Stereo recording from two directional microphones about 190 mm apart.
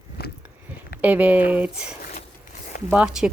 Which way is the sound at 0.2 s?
55° left (ahead or behind).